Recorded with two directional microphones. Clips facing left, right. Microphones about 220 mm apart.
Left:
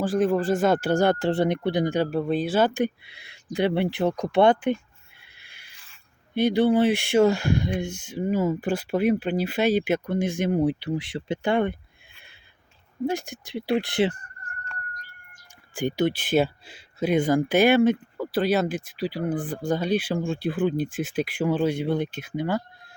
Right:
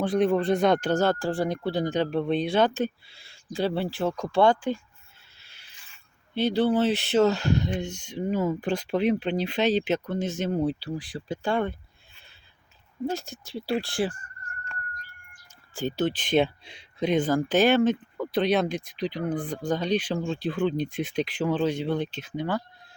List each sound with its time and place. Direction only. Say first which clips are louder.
0.0 s speech: left 1 dB; centre (ahead or behind); by 4.8 s 20° left (ahead or behind)
5.2 s wild animals: left 3 dB; 15° left (ahead or behind)
6.3 s speech: left 3 dB; 15° left (ahead or behind)
13.1 s speech: left 3 dB; 15° left (ahead or behind)
15.7 s speech: left 3 dB; 15° left (ahead or behind)